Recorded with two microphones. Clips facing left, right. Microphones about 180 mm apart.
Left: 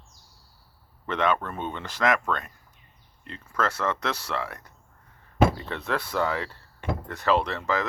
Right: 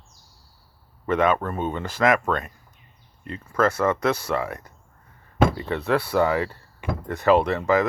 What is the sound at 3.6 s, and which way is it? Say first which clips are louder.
Speech: right 6 dB; 10° right (ahead or behind).